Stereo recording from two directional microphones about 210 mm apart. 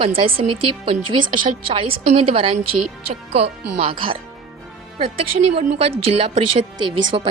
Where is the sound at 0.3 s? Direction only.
25° right (ahead or behind).